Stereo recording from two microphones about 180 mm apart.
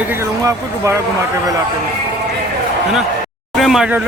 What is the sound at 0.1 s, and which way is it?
Speech, 15° right (ahead or behind).